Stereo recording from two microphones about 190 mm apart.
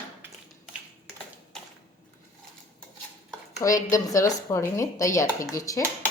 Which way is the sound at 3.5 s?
15° left (ahead or behind).